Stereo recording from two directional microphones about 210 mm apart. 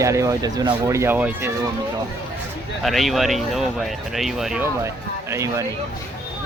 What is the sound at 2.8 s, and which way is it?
Speech, centre (ahead or behind).